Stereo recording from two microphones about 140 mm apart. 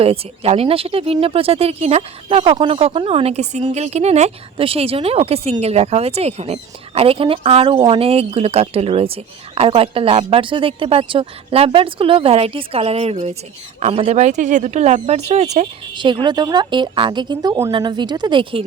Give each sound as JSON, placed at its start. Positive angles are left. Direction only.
{"t": 0.0, "sound": "speech", "side_deg": -45}
{"t": 16.0, "sound": "speech", "side_deg": -35}